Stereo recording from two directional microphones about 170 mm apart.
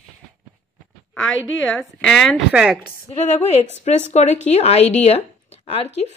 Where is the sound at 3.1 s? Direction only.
40° left (ahead or behind).